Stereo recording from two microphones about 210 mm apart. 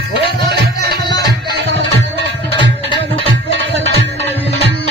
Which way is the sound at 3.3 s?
60° right (ahead or behind).